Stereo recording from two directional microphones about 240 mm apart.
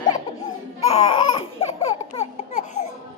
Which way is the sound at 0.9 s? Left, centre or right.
Left.